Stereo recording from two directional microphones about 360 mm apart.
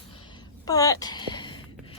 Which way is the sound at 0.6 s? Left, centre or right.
Centre.